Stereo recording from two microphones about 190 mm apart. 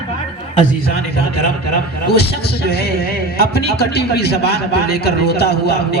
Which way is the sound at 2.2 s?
55° left (ahead or behind).